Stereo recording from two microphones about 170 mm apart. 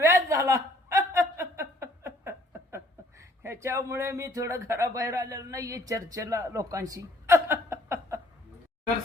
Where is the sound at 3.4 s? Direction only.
15° right (ahead or behind).